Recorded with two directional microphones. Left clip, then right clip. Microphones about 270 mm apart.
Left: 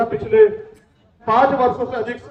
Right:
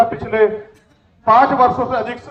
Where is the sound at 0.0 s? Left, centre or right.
Centre.